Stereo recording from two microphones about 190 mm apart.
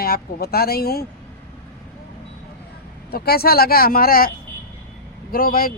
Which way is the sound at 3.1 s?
55° left (ahead or behind).